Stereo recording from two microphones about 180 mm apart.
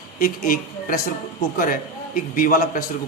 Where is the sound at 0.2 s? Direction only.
50° left (ahead or behind).